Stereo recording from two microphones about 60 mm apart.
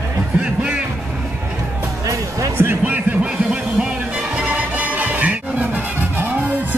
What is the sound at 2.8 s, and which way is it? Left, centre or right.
Music, right.